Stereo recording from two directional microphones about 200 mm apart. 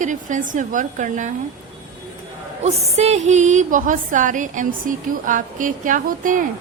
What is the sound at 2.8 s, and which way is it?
A woman's voice, 30° right (ahead or behind).